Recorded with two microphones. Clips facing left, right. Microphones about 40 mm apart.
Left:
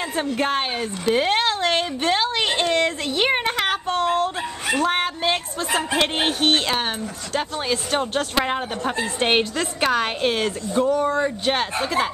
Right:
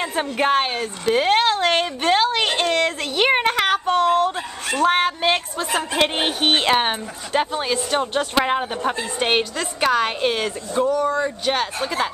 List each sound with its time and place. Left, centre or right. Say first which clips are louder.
0.0 s a woman's voice: right 2 dB; centre
4.8 s a woman's voice: right 7 dB; centre
5.7 s a woman's voice: right 1 dB; centre
6.5 s speech: right 3 dB; right
7.6 s a woman's voice: right 1 dB; centre
10.9 s speech: even; left
11.2 s speech: even; centre